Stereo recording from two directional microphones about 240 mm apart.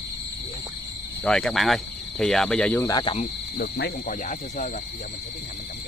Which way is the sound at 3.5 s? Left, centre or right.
Left.